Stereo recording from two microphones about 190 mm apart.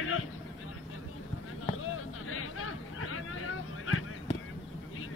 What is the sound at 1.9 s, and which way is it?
Hubbub, 90° left.